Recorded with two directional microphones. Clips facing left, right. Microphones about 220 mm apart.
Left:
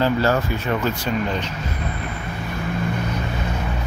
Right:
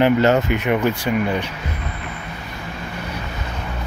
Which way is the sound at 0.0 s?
20° right (ahead or behind).